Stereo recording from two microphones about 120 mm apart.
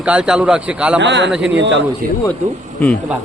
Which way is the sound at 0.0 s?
10° right (ahead or behind).